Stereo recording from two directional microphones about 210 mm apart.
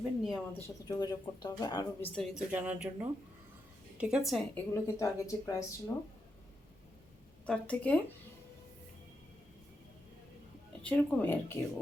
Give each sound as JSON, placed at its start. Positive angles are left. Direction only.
{"t": 0.0, "sound": "speech", "side_deg": 0}
{"t": 0.5, "sound": "speech", "side_deg": 20}
{"t": 2.1, "sound": "speech", "side_deg": -5}
{"t": 4.7, "sound": "speech", "side_deg": 15}
{"t": 7.4, "sound": "speech", "side_deg": 5}
{"t": 10.8, "sound": "speech", "side_deg": 5}